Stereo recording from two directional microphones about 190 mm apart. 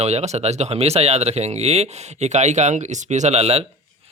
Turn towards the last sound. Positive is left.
turn(degrees=-30)  # may be behind; listen again after turning